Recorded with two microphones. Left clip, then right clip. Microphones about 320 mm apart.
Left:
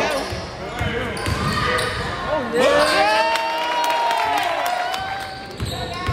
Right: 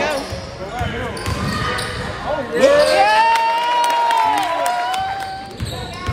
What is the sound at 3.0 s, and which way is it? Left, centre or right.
Crowd, right.